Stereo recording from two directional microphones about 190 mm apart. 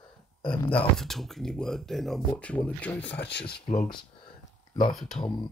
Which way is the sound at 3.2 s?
60° left (ahead or behind).